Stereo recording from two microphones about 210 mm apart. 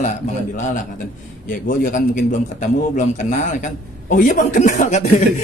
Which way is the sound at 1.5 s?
40° left (ahead or behind).